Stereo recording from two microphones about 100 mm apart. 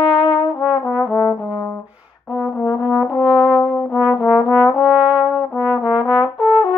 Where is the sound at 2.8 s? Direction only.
10° right (ahead or behind).